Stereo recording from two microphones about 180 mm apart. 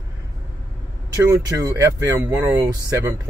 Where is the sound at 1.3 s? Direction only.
20° right (ahead or behind).